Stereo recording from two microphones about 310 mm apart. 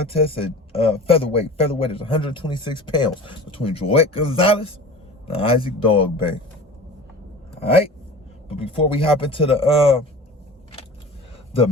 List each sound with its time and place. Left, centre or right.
0.1 s a man's voice: centre
8.4 s a man's voice: centre